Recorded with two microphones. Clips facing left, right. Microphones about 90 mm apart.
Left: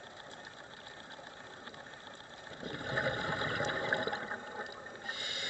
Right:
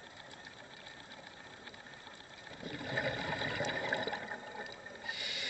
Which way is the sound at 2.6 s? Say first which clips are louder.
Left 2 dB; 35° left (ahead or behind).